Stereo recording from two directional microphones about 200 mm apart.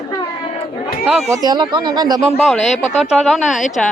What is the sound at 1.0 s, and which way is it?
Speech, centre (ahead or behind).